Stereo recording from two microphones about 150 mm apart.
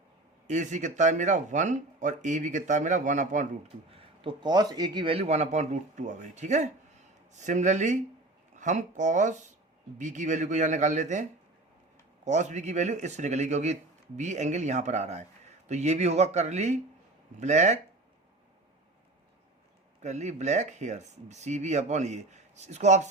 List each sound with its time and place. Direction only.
0.4 s speech: 55° right (ahead or behind)
3.9 s speech: 35° right (ahead or behind); by 17.7 s 50° right (ahead or behind)
20.0 s speech: 50° right (ahead or behind)